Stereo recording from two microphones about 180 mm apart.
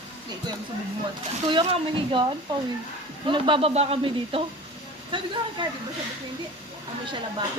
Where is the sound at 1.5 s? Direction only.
30° right (ahead or behind).